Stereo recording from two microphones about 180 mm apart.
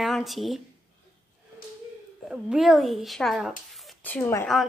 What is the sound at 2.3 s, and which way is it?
A woman's voice, 5° right (ahead or behind).